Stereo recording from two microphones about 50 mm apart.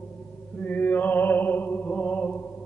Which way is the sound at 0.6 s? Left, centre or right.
Left.